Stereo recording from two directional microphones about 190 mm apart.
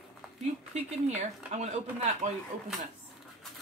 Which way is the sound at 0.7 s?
35° right (ahead or behind).